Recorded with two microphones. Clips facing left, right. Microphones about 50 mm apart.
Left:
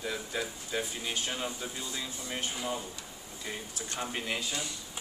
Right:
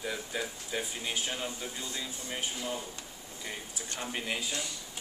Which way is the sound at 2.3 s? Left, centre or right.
Centre.